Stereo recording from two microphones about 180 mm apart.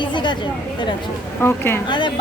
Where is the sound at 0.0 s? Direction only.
25° left (ahead or behind).